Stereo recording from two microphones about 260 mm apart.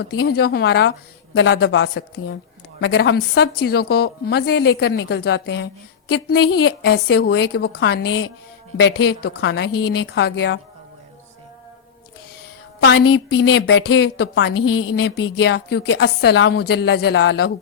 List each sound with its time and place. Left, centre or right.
0.2 s a woman's voice: left
12.8 s a woman's voice: left